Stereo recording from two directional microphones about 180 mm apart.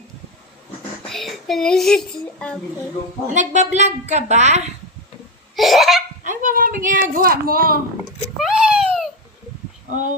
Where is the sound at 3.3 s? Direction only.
40° right (ahead or behind).